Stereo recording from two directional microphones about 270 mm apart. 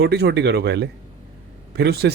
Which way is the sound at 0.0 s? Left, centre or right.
Right.